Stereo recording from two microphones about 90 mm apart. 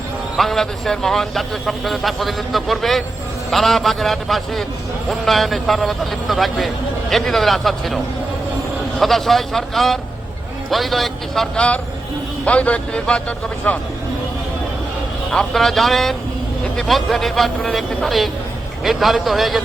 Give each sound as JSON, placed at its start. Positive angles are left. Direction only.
{"t": 0.3, "sound": "a man's voice", "side_deg": 5}
{"t": 9.0, "sound": "a man's voice", "side_deg": 0}
{"t": 11.5, "sound": "speech", "side_deg": 10}
{"t": 15.3, "sound": "a man's voice", "side_deg": 5}